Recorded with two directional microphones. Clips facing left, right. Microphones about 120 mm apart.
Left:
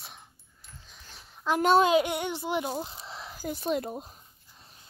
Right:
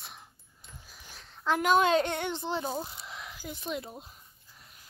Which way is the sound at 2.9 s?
30° left (ahead or behind).